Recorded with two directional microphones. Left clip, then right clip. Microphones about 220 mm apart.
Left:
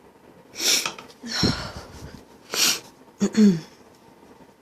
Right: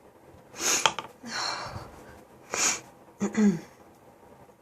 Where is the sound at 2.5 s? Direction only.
20° left (ahead or behind).